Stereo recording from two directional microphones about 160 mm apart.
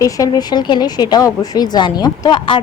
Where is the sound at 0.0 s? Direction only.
25° left (ahead or behind).